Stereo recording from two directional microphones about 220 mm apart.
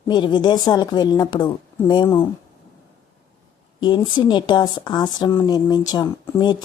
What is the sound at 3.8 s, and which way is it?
Speech, 20° left (ahead or behind).